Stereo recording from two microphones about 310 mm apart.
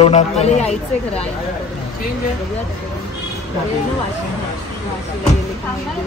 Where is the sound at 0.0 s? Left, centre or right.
Left.